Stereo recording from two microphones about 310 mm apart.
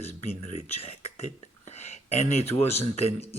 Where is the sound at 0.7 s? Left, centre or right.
Centre.